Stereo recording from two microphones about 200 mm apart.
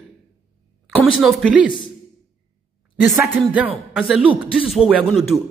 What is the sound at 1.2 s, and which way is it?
Speech, 5° right (ahead or behind).